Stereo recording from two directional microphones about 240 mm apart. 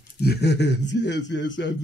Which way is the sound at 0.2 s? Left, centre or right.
Left.